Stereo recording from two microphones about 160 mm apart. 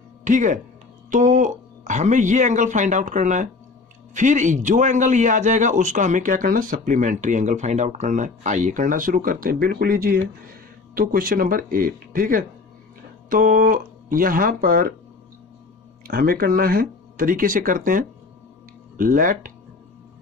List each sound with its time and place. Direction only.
0.2 s a man's voice: 50° right (ahead or behind)
16.1 s speech: 65° right (ahead or behind)